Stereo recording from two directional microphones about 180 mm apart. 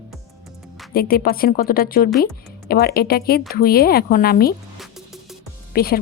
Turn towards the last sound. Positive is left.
turn(degrees=55)  # may be behind; listen again after turning